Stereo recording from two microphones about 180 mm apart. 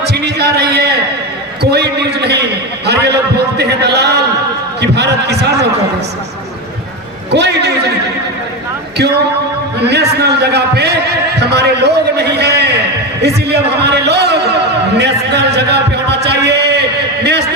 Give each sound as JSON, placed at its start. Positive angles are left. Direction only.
{"t": 0.0, "sound": "a man's voice", "side_deg": -65}
{"t": 7.3, "sound": "a man's voice", "side_deg": -70}
{"t": 9.8, "sound": "a man's voice", "side_deg": -65}
{"t": 16.2, "sound": "chant", "side_deg": -65}